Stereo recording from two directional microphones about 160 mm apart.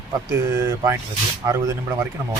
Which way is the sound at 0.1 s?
20° right (ahead or behind).